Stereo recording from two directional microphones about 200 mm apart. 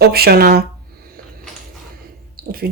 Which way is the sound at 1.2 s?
50° right (ahead or behind).